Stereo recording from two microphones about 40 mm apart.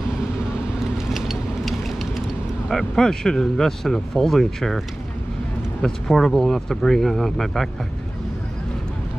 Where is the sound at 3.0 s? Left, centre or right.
Centre.